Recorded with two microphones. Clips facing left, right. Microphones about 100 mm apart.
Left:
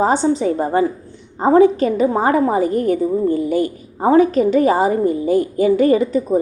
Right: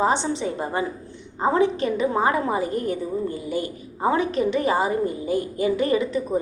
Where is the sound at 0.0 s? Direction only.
40° left (ahead or behind).